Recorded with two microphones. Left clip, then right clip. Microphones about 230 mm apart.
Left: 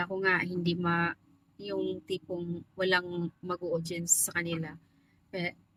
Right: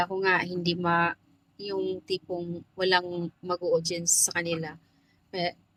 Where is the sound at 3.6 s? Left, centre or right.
Left.